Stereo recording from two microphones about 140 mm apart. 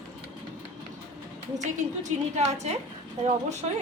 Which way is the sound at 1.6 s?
55° right (ahead or behind).